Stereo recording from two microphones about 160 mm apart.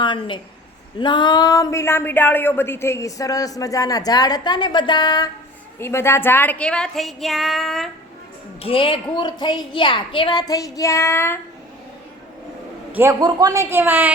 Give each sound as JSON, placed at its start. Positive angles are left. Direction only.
{"t": 0.0, "sound": "a woman's voice", "side_deg": 30}
{"t": 8.6, "sound": "speech", "side_deg": 35}
{"t": 12.9, "sound": "a woman's voice", "side_deg": -15}